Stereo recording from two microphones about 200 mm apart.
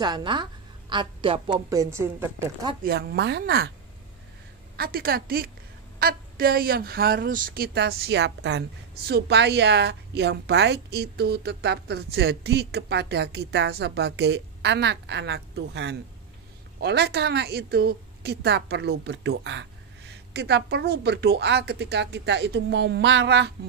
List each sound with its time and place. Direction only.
0.0 s a woman's voice: 20° right (ahead or behind)
1.7 s a woman's voice: 15° right (ahead or behind)
2.8 s speech: 50° right (ahead or behind)
4.7 s speech: 50° right (ahead or behind)